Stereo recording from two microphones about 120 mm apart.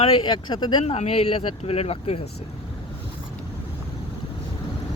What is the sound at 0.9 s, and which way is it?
Speech, 60° left (ahead or behind).